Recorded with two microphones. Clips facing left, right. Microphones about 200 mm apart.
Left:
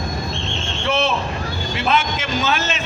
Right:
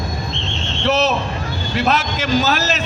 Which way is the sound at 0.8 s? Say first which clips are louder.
Right 3 dB; 40° right (ahead or behind).